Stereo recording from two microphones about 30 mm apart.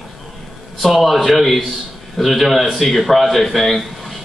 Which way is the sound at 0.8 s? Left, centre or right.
Centre.